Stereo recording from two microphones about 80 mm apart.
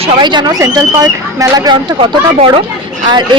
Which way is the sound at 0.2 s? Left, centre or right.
Right.